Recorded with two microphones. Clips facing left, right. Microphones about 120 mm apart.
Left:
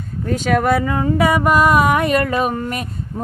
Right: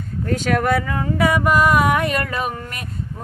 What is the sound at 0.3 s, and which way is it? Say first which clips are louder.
Speech: left 3 dB; 10° left (ahead or behind).